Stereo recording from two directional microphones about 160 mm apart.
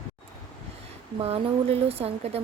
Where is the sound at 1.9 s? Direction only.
40° right (ahead or behind).